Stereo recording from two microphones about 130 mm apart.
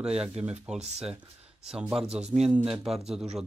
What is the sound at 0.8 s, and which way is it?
Speech, 55° right (ahead or behind).